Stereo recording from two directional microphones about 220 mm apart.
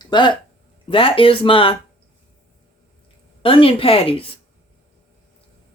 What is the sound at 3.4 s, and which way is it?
Speech, 25° left (ahead or behind).